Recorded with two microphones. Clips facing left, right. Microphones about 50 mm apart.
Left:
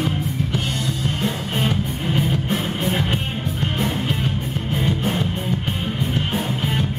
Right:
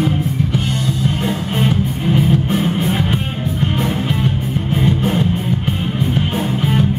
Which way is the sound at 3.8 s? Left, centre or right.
Right.